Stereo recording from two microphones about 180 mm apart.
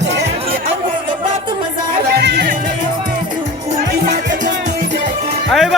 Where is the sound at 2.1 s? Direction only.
60° right (ahead or behind).